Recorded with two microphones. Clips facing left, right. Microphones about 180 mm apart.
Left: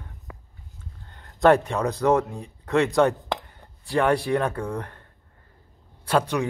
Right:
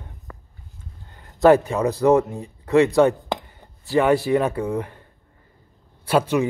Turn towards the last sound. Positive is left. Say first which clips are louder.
# right 4 dB
turn(degrees=-5)  # may be behind; listen again after turning